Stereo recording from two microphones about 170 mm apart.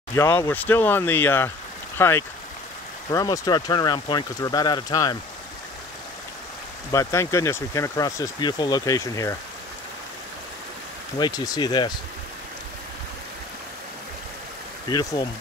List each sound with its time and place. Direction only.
0.1 s speech: 15° left (ahead or behind)
6.9 s speech: 20° left (ahead or behind)
11.1 s speech: 25° left (ahead or behind)
14.9 s speech: 25° left (ahead or behind)